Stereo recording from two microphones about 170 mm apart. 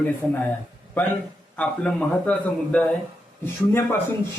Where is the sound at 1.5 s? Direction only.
10° left (ahead or behind).